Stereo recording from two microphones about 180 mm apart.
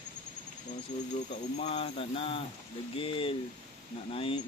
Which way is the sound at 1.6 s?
35° left (ahead or behind).